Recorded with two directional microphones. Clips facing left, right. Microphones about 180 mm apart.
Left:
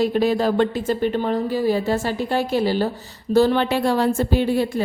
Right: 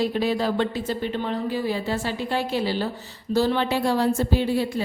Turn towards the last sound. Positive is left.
turn(degrees=55)  # may be behind; listen again after turning